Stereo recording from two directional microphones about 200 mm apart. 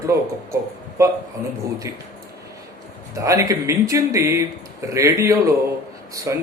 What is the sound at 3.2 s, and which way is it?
A man's voice, 15° right (ahead or behind).